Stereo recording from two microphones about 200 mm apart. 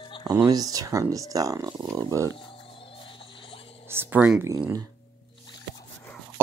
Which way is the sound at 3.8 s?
10° right (ahead or behind).